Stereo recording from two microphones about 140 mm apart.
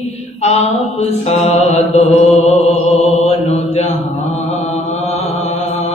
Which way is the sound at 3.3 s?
50° left (ahead or behind).